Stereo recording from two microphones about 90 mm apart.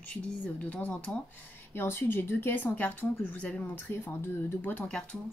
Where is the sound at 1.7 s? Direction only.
25° left (ahead or behind).